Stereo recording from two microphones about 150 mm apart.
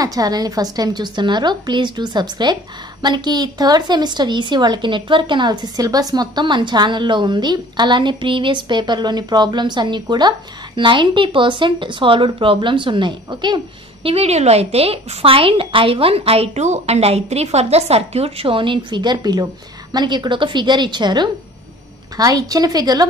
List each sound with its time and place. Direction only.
0.0 s a woman's voice: 25° right (ahead or behind)
14.0 s a woman's voice: 45° right (ahead or behind); by 23.0 s 25° right (ahead or behind)